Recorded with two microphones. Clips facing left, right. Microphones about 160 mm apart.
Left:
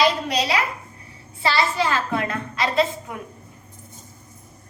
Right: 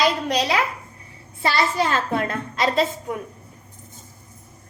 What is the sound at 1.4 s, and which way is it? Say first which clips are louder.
A child's voice: even; 50° right (ahead or behind).